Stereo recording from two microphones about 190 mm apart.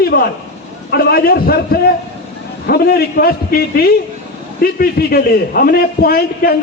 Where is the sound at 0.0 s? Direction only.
55° left (ahead or behind).